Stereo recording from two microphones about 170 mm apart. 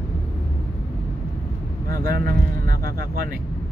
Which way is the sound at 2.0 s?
60° right (ahead or behind).